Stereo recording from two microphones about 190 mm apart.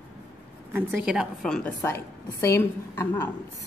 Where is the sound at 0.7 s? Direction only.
10° right (ahead or behind); by 3.3 s 10° left (ahead or behind).